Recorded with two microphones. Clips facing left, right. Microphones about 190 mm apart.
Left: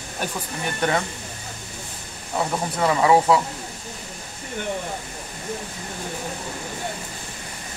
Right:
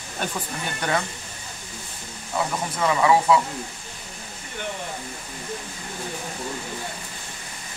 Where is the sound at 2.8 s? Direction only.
30° left (ahead or behind).